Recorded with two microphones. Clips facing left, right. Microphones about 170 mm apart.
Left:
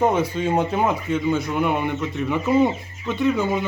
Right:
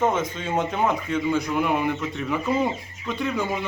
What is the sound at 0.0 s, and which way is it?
Speech, 10° left (ahead or behind).